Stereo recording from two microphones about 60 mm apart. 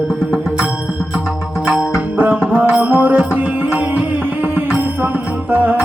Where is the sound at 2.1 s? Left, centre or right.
Right.